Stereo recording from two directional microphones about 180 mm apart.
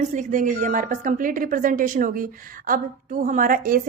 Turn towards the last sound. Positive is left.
turn(degrees=-50)  # may be behind; listen again after turning